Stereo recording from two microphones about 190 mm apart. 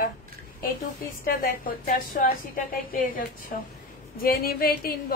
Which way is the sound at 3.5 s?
45° left (ahead or behind).